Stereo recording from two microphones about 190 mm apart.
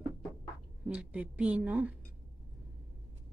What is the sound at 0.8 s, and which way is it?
Speech, 5° right (ahead or behind).